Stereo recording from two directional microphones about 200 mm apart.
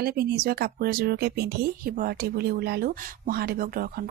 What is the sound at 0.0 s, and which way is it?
Speech, 50° right (ahead or behind).